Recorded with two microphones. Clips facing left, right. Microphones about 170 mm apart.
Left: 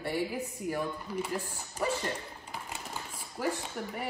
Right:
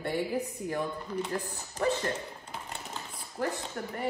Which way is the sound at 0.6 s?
5° left (ahead or behind).